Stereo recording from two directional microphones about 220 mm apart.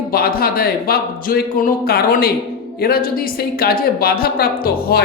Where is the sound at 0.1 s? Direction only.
45° left (ahead or behind).